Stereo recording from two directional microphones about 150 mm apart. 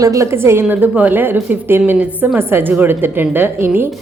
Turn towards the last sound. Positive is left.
turn(degrees=-15)  # may be behind; listen again after turning